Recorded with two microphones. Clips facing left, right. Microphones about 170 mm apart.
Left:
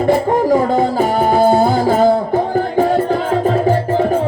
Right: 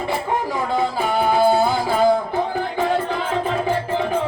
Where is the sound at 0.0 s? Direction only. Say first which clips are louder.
Left 9 dB; 45° left (ahead or behind).